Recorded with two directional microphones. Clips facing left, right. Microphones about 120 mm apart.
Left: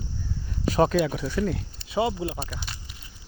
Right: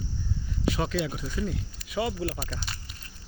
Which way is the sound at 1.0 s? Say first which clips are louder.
Left 6 dB; 70° left (ahead or behind).